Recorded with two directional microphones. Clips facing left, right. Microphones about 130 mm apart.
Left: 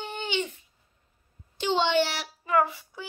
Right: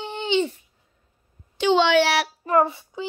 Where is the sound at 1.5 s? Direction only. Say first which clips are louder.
Right 6 dB; 90° right.